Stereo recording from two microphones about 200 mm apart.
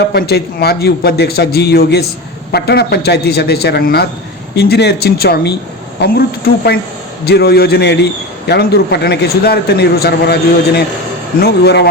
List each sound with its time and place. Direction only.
0.0 s a man's voice: 55° left (ahead or behind)
11.4 s a man's voice: 55° left (ahead or behind)